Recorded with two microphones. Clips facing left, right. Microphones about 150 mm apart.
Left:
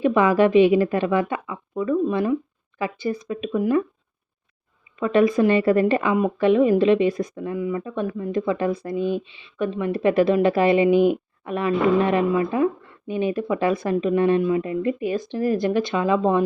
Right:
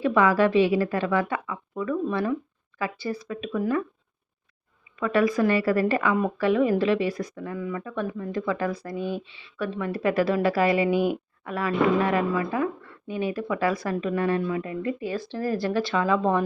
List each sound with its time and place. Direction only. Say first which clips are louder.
0.0 s a woman's voice: left 3 dB; 20° left (ahead or behind)
4.9 s speech: left 4 dB; 25° left (ahead or behind)